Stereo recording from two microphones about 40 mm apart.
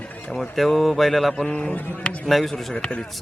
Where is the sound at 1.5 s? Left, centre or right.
Left.